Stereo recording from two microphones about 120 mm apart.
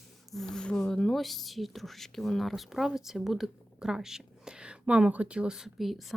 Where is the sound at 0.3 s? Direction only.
5° left (ahead or behind).